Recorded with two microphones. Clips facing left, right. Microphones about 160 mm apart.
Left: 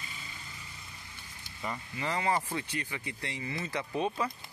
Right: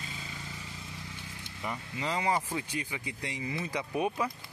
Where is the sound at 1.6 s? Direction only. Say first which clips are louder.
Even; 15° right (ahead or behind).